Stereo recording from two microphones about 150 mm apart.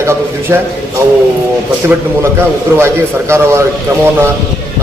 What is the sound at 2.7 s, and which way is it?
Speech, 15° right (ahead or behind).